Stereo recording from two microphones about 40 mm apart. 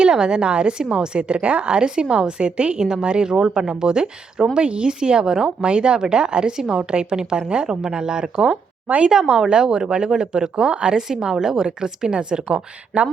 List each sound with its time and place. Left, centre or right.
0.0 s a woman's voice: right
8.4 s speech: right
9.0 s a woman's voice: centre
12.9 s speech: right